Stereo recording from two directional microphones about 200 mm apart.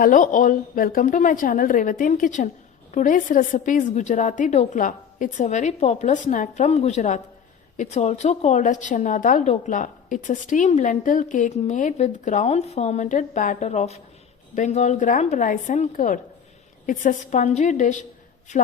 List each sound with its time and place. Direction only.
0.0 s a woman's voice: 40° left (ahead or behind)